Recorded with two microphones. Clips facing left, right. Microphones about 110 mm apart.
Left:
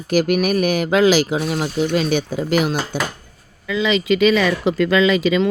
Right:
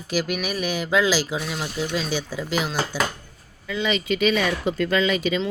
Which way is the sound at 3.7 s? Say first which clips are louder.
Left 6 dB; 90° left.